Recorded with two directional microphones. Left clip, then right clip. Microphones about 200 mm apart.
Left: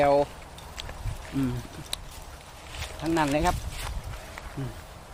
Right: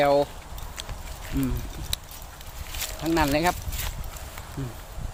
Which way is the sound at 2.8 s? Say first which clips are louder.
Right 2 dB; 20° right (ahead or behind).